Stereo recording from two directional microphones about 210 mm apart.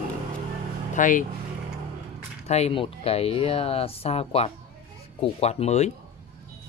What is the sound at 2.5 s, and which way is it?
Speech, 30° left (ahead or behind).